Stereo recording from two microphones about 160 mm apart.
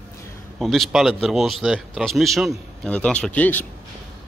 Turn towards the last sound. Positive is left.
turn(degrees=10)  # may be behind; listen again after turning